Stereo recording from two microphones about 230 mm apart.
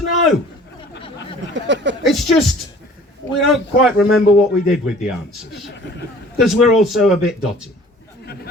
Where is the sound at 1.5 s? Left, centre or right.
Right.